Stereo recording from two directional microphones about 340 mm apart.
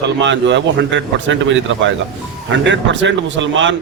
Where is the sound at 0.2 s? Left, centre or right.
Right.